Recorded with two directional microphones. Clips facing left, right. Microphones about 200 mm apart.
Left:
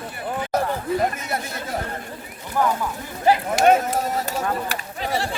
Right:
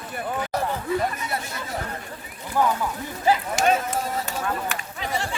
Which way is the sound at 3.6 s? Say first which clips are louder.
Left 7 dB; 55° left (ahead or behind).